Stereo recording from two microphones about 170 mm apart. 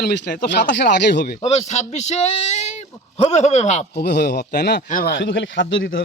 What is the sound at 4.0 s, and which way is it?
Speech, 75° left (ahead or behind).